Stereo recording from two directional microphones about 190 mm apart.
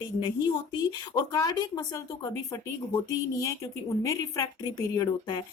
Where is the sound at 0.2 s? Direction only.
20° left (ahead or behind).